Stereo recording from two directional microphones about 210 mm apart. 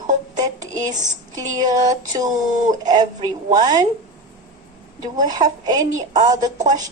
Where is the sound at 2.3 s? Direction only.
35° right (ahead or behind).